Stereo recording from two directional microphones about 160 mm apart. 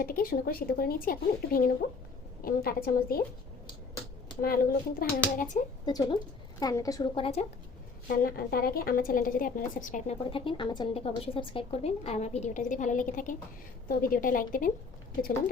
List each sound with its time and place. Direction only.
0.0 s a woman's voice: 65° left (ahead or behind)
4.4 s a woman's voice: 65° left (ahead or behind)
5.8 s a woman's voice: 25° left (ahead or behind)
7.2 s a woman's voice: 40° left (ahead or behind)
8.0 s a woman's voice: 65° left (ahead or behind)
10.2 s a woman's voice: 30° left (ahead or behind); by 14.7 s 60° left (ahead or behind)